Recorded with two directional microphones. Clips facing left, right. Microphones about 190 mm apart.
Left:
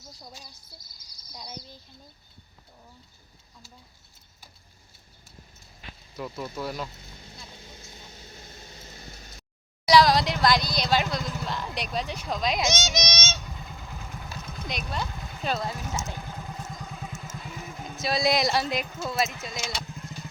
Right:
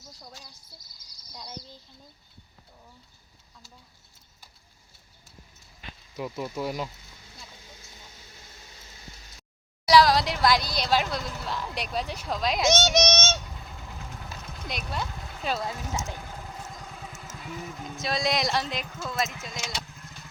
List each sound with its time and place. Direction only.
0.2 s speech: 10° left (ahead or behind)
6.1 s speech: 15° right (ahead or behind)
8.2 s vehicle: 35° left (ahead or behind)
9.8 s speech: 5° right (ahead or behind)
12.7 s speech: 60° right (ahead or behind)
14.7 s speech: 5° right (ahead or behind)
17.8 s speech: 5° left (ahead or behind)